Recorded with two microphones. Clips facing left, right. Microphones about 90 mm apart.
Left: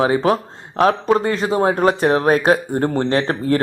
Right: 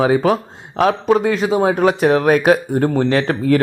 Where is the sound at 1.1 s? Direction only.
35° left (ahead or behind).